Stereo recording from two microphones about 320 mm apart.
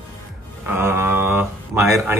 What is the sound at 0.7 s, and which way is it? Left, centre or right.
Speech, centre.